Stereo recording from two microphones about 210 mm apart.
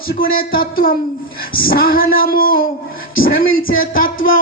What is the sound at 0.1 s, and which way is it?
A woman's voice, 45° left (ahead or behind).